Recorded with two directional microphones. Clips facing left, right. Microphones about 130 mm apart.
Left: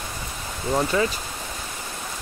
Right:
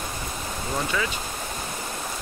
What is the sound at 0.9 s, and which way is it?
Speech, 35° left (ahead or behind).